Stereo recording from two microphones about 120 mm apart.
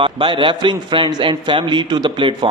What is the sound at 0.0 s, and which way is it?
A man's voice, 45° right (ahead or behind).